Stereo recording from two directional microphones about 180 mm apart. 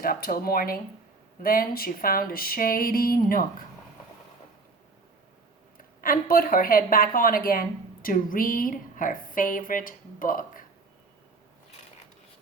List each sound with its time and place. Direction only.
0.0 s speech: 55° left (ahead or behind)
1.4 s a sound: 55° left (ahead or behind)
5.7 s speech: 50° left (ahead or behind)